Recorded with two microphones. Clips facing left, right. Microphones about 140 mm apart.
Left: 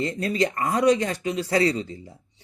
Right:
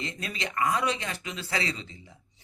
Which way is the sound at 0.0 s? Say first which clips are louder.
Left 12 dB; 45° left (ahead or behind).